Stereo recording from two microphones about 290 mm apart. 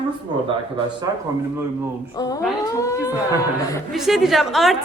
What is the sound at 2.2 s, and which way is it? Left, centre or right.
Speech, centre.